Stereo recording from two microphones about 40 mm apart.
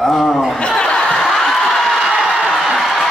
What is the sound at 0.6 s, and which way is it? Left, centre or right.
Chuckle, left.